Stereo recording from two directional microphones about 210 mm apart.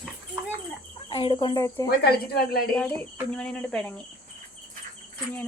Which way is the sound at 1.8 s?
45° left (ahead or behind).